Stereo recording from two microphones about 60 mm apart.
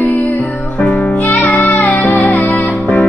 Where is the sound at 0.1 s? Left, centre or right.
Left.